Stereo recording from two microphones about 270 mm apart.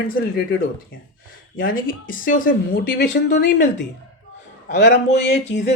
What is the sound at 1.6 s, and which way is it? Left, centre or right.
A woman's voice, left.